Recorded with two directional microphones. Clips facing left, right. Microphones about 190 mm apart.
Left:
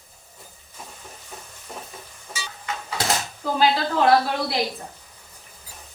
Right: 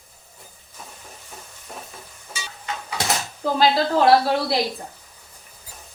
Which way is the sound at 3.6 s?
40° right (ahead or behind).